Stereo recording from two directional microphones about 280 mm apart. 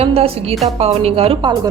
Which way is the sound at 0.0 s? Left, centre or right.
Right.